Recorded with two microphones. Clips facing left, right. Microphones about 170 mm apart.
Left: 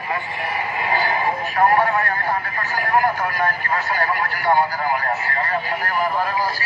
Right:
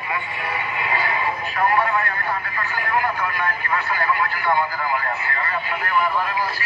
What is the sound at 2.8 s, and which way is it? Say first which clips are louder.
Vehicle: left 4 dB; 40° left (ahead or behind).